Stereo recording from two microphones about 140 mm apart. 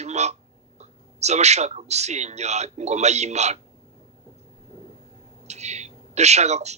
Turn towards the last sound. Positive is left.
turn(degrees=-50)  # may be behind; listen again after turning